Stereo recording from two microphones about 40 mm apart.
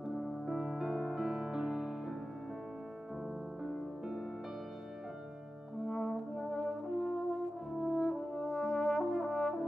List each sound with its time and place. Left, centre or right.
0.5 s music: centre
3.6 s music: centre
5.9 s brass instrument: centre